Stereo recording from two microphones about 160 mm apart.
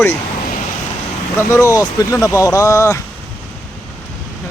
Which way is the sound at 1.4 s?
20° left (ahead or behind).